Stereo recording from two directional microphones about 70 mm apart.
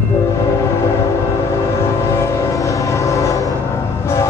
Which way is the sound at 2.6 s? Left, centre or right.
Left.